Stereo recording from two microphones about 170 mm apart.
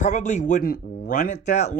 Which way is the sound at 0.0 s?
45° left (ahead or behind).